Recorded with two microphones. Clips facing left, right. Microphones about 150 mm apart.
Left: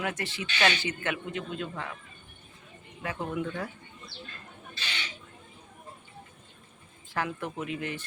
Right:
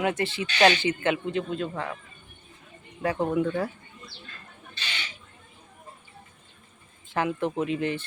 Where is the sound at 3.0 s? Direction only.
40° right (ahead or behind).